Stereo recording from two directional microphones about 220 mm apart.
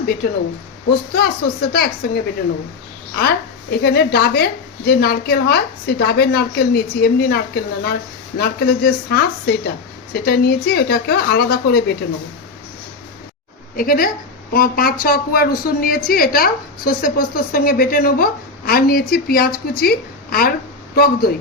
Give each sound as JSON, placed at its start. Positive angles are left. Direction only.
{"t": 1.1, "sound": "a woman's voice", "side_deg": 45}
{"t": 13.7, "sound": "a woman's voice", "side_deg": 40}